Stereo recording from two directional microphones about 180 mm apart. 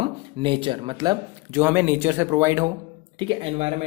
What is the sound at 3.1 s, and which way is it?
Speech, 30° right (ahead or behind).